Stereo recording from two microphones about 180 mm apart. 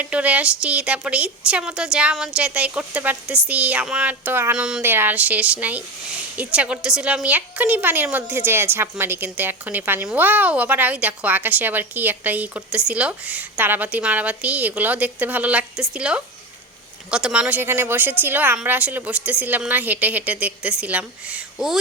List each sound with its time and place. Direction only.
0.0 s a woman's voice: 10° right (ahead or behind)